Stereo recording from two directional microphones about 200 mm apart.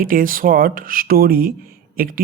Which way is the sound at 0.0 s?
45° right (ahead or behind).